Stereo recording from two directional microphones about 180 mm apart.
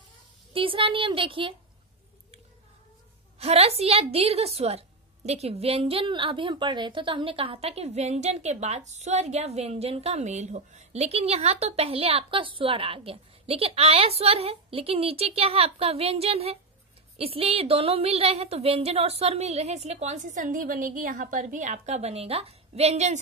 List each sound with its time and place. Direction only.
0.5 s a child's voice: 30° right (ahead or behind)
3.3 s a woman's voice: 35° right (ahead or behind)